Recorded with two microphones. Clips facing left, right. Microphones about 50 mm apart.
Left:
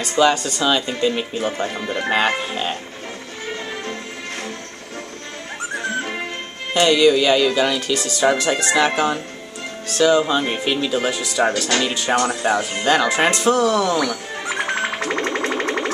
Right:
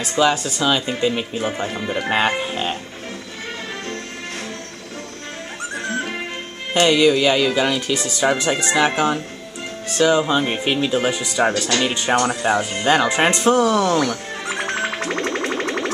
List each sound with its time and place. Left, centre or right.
0.0 s speech: centre
5.8 s music: centre
6.8 s speech: centre
13.7 s music: centre